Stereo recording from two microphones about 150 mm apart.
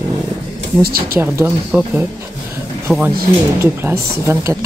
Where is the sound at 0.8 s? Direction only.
80° right.